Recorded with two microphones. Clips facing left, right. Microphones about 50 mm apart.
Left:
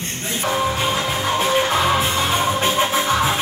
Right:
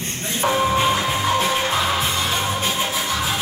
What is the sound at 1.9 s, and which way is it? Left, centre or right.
Music, left.